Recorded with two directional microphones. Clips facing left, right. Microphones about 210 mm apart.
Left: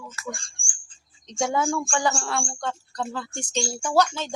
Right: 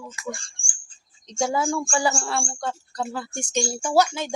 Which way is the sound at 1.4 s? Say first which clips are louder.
Right 1 dB; centre (ahead or behind).